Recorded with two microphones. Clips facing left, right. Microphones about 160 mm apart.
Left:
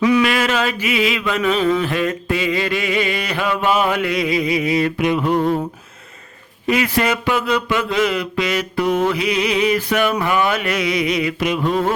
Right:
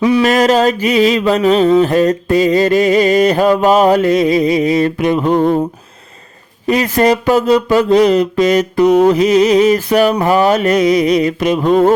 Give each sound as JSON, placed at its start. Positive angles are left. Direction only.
{"t": 0.0, "sound": "mantra", "side_deg": -35}
{"t": 6.7, "sound": "mantra", "side_deg": -40}